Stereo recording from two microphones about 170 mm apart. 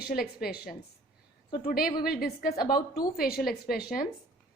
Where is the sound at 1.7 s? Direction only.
60° left (ahead or behind).